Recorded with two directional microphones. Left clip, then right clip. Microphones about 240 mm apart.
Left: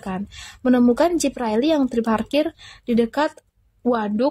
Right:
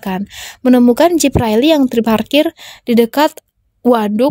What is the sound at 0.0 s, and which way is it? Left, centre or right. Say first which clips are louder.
A woman's voice: right 8 dB; right.